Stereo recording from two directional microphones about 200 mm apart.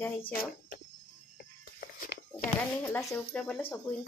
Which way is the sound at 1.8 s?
50° left (ahead or behind).